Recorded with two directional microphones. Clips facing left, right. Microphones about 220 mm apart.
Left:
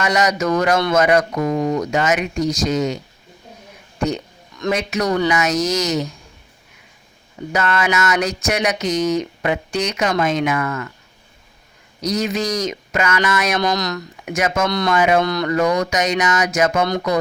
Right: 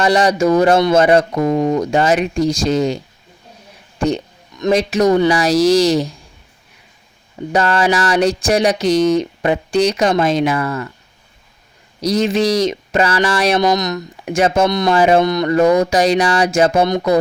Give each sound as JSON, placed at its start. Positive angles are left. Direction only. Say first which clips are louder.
{"t": 0.0, "sound": "speech", "louder": "right 5 dB", "side_deg": -30}
{"t": 3.9, "sound": "a sound", "louder": "right 4 dB", "side_deg": -30}
{"t": 4.7, "sound": "speech", "louder": "right 7 dB", "side_deg": -30}
{"t": 7.5, "sound": "speech", "louder": "right 4 dB", "side_deg": -30}
{"t": 12.0, "sound": "speech", "louder": "right 6 dB", "side_deg": -30}
{"t": 13.6, "sound": "speech", "louder": "right 5 dB", "side_deg": -20}
{"t": 14.3, "sound": "speech", "louder": "right 6 dB", "side_deg": -30}
{"t": 14.7, "sound": "speech", "louder": "right 4 dB", "side_deg": -20}
{"t": 14.9, "sound": "speech", "louder": "right 4 dB", "side_deg": -30}